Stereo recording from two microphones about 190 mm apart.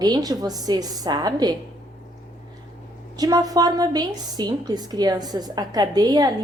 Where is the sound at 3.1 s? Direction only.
20° right (ahead or behind).